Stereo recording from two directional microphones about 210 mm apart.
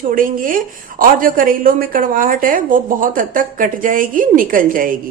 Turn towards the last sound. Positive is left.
turn(degrees=-40)  # may be behind; listen again after turning